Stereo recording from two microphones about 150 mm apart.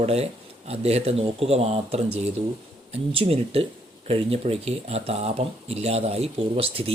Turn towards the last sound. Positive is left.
turn(degrees=-40)  # may be behind; listen again after turning